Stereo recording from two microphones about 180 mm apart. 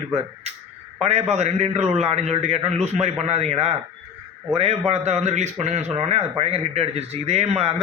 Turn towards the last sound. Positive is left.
turn(degrees=-35)  # may be behind; listen again after turning